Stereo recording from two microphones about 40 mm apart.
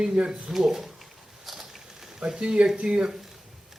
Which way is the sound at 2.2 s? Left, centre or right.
Centre.